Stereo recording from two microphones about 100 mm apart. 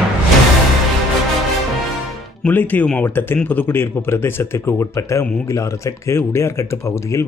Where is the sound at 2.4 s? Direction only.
20° left (ahead or behind).